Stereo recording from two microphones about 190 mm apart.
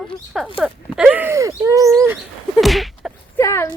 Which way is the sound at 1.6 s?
15° right (ahead or behind).